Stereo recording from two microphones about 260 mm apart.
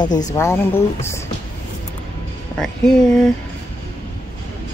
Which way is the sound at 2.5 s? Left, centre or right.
Centre.